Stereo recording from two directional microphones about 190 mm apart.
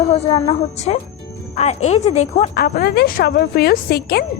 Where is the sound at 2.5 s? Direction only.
50° left (ahead or behind).